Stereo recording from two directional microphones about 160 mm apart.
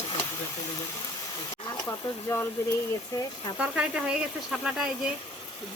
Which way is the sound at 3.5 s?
5° right (ahead or behind).